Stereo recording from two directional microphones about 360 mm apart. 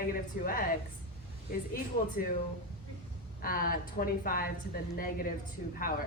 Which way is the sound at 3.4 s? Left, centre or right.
Left.